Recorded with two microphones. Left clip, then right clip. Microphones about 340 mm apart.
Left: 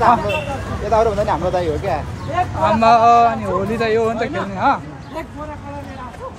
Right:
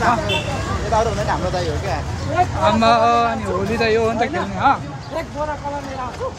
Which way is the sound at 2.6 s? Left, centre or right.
Centre.